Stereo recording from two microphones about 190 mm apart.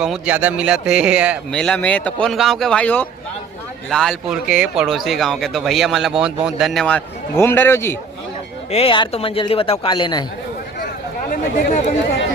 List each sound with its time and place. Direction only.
0.0 s speech: 5° right (ahead or behind)
1.5 s speech: 5° left (ahead or behind)
8.7 s a man's voice: 30° left (ahead or behind)
11.3 s speech: 50° left (ahead or behind)